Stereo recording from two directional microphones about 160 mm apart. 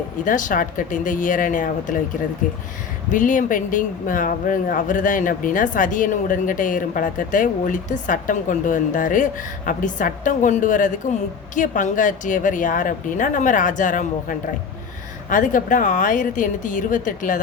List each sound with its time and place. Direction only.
0.3 s speech: 55° left (ahead or behind)
3.1 s speech: 55° left (ahead or behind)